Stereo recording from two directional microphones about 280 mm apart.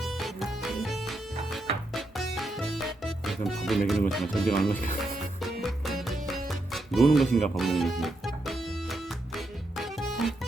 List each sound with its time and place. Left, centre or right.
0.0 s music: centre